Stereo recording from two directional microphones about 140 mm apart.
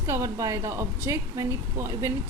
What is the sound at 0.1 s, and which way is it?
A woman's voice, 20° right (ahead or behind).